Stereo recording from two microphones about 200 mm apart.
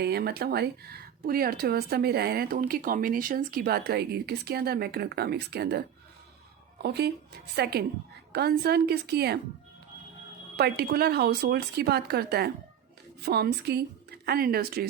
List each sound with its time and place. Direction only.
0.0 s speech: 55° right (ahead or behind)
6.8 s speech: 55° right (ahead or behind)
10.6 s speech: 50° right (ahead or behind)